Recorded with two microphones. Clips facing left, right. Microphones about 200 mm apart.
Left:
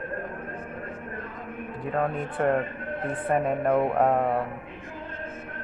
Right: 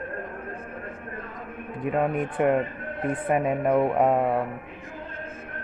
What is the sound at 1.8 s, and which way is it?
Speech, 15° right (ahead or behind).